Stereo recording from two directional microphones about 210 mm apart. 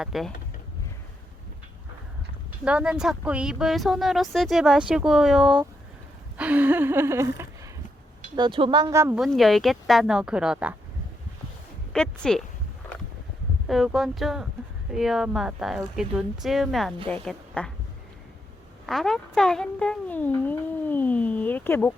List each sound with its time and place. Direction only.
0.0 s speech: centre (ahead or behind)
2.6 s speech: 5° right (ahead or behind)
6.3 s gasp: 5° right (ahead or behind)
8.4 s speech: 25° right (ahead or behind)
9.2 s speech: centre (ahead or behind)
11.9 s speech: 5° left (ahead or behind)
13.7 s a woman's voice: centre (ahead or behind)
18.9 s speech: centre (ahead or behind)